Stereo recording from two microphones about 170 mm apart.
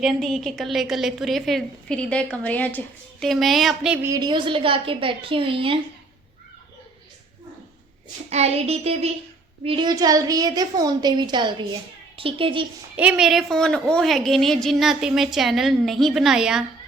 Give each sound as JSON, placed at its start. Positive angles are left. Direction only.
{"t": 0.0, "sound": "a woman's voice", "side_deg": 0}
{"t": 4.1, "sound": "a woman's voice", "side_deg": -25}
{"t": 8.3, "sound": "a woman's voice", "side_deg": -40}
{"t": 13.0, "sound": "a woman's voice", "side_deg": -5}